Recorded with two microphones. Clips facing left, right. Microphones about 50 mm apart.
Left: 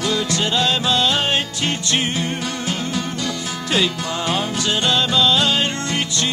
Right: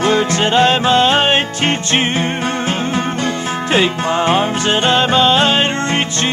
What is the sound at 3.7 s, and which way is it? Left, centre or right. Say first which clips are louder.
Music: right 6 dB; right.